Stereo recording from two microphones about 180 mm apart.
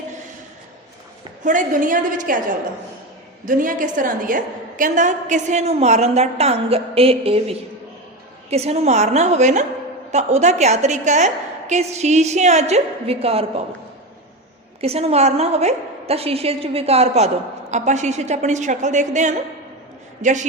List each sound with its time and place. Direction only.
1.5 s a woman's voice: 45° right (ahead or behind)
3.4 s a woman's voice: 45° right (ahead or behind)
14.8 s a woman's voice: 35° right (ahead or behind)